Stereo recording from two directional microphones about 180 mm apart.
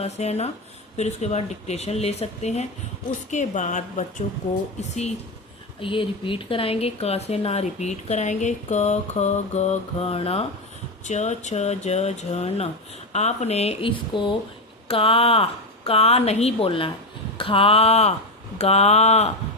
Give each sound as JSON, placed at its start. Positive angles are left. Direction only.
{"t": 0.0, "sound": "a woman's voice", "side_deg": 35}